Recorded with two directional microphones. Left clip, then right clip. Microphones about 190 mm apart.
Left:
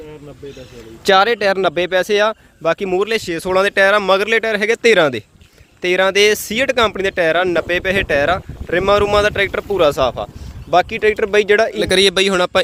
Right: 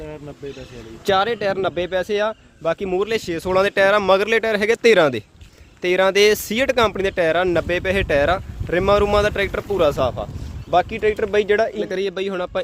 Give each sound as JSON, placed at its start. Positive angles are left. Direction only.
{"t": 1.0, "sound": "speech", "side_deg": 15}